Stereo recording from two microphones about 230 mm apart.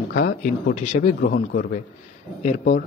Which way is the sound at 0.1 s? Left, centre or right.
Left.